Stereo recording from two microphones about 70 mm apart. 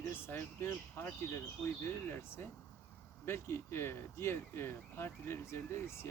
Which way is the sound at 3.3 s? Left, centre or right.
Left.